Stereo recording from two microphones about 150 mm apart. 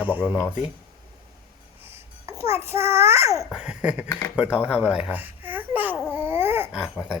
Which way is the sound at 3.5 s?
5° right (ahead or behind).